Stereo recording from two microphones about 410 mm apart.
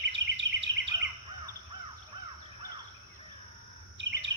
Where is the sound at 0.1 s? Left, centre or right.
Right.